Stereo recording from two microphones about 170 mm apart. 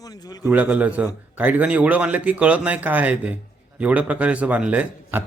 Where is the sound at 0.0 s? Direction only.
20° left (ahead or behind).